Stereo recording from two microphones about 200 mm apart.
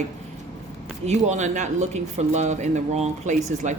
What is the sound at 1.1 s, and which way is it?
Speech, 35° right (ahead or behind).